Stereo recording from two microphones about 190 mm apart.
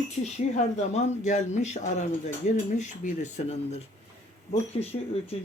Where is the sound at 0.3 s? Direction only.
35° left (ahead or behind).